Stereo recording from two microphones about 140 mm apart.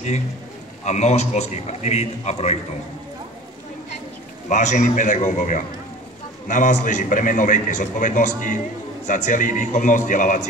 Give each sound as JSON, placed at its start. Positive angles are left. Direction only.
{"t": 0.8, "sound": "a man's voice", "side_deg": 55}
{"t": 4.5, "sound": "a man's voice", "side_deg": 60}